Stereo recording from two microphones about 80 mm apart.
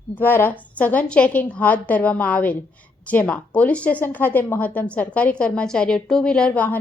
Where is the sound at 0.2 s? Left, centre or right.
Left.